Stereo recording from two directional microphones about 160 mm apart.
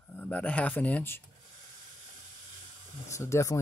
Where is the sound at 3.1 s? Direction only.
20° left (ahead or behind).